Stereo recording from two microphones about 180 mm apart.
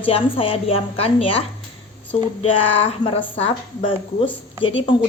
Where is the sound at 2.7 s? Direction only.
30° left (ahead or behind).